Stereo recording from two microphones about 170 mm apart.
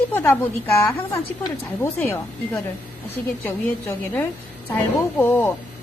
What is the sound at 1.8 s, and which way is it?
Speech, 15° left (ahead or behind).